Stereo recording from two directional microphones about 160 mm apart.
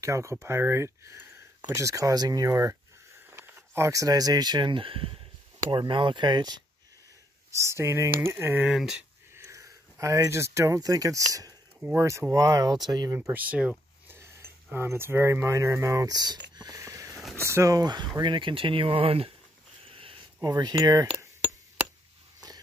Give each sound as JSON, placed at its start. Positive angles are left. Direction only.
{"t": 0.0, "sound": "speech", "side_deg": -20}
{"t": 8.7, "sound": "speech", "side_deg": -5}
{"t": 9.3, "sound": "speech", "side_deg": -15}
{"t": 11.3, "sound": "a sound", "side_deg": -20}
{"t": 11.9, "sound": "speech", "side_deg": -15}
{"t": 16.5, "sound": "wheeze", "side_deg": -20}
{"t": 17.4, "sound": "speech", "side_deg": -15}
{"t": 19.9, "sound": "a sound", "side_deg": -35}
{"t": 20.3, "sound": "speech", "side_deg": -25}